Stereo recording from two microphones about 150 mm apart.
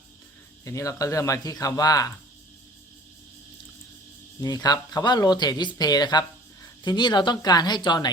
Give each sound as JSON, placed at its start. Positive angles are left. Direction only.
{"t": 0.6, "sound": "speech", "side_deg": 20}
{"t": 4.4, "sound": "speech", "side_deg": 25}